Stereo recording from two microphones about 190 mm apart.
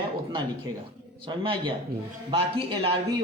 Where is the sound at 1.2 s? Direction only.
25° right (ahead or behind).